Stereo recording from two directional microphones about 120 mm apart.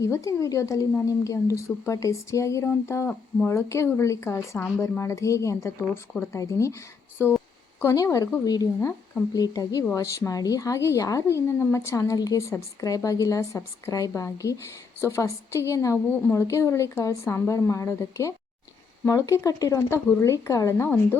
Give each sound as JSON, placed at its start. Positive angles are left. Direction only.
{"t": 0.0, "sound": "a woman's voice", "side_deg": 25}